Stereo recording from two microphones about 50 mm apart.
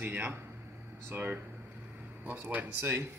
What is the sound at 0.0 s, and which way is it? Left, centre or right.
Speech, right.